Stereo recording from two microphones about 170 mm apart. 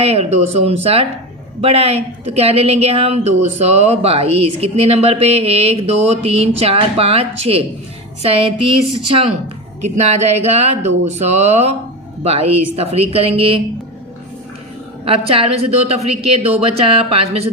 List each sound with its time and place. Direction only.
0.0 s a woman's voice: 35° right (ahead or behind)
9.8 s a woman's voice: 40° right (ahead or behind)
15.0 s a woman's voice: 35° right (ahead or behind)